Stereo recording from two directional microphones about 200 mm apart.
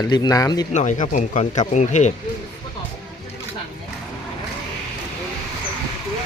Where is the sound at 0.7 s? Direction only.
35° left (ahead or behind).